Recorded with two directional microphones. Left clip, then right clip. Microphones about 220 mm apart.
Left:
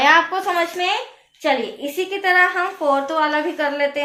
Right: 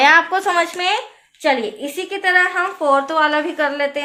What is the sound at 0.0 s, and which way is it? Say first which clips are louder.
A woman's voice: right 2 dB; 40° right (ahead or behind).